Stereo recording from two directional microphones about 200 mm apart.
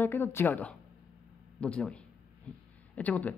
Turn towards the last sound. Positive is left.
turn(degrees=5)  # may be behind; listen again after turning